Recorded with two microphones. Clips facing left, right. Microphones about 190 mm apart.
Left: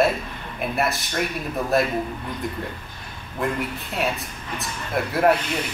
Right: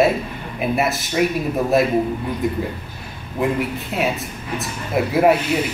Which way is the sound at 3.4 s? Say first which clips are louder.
Right 5 dB; centre (ahead or behind).